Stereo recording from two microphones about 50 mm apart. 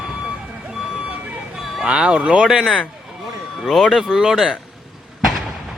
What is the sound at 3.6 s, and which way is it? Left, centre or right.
Speech, centre.